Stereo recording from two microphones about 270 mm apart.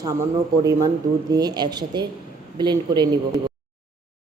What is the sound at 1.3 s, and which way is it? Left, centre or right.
A woman's voice, centre.